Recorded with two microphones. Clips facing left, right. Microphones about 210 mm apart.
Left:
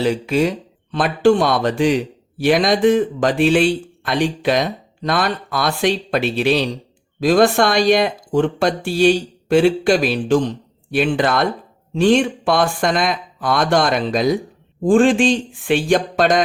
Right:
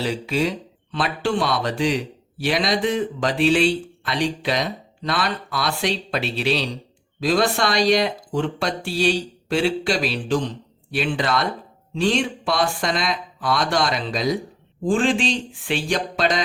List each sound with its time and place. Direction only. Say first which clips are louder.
0.0 s speech: left 6 dB; 50° left (ahead or behind)